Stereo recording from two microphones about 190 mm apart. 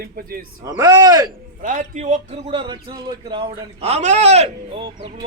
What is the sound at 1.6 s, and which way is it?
Speech, 40° right (ahead or behind).